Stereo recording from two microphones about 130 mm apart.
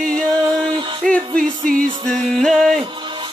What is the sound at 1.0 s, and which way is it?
Music, 5° left (ahead or behind).